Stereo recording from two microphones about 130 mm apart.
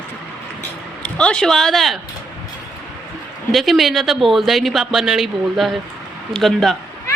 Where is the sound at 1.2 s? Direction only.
5° left (ahead or behind).